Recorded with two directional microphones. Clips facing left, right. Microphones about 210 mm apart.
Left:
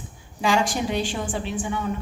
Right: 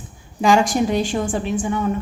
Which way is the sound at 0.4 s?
45° right (ahead or behind).